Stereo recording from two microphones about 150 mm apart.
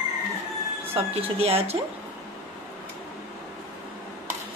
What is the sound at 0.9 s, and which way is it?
Speech, 40° right (ahead or behind).